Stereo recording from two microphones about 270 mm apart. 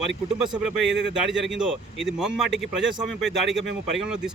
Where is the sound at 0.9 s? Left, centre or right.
Right.